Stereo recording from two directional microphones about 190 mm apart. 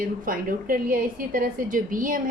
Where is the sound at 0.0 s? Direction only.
45° right (ahead or behind).